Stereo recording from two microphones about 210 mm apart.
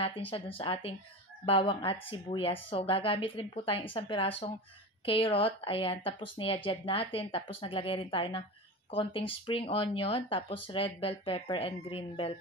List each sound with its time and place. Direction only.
0.0 s speech: 25° left (ahead or behind)